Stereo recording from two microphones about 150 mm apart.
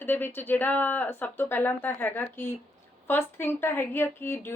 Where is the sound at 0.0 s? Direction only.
15° left (ahead or behind).